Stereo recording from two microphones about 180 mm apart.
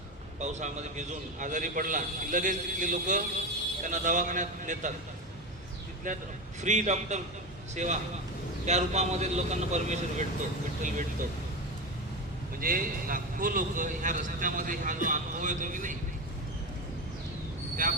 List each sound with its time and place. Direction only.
0.3 s a man's voice: 40° right (ahead or behind)
6.1 s a man's voice: 45° right (ahead or behind)
12.5 s a man's voice: 50° right (ahead or behind)
17.8 s a man's voice: 50° right (ahead or behind)